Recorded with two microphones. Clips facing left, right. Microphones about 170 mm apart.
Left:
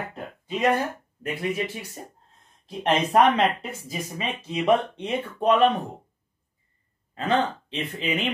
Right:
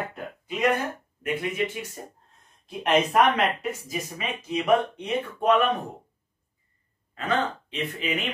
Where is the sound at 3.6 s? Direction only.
30° left (ahead or behind).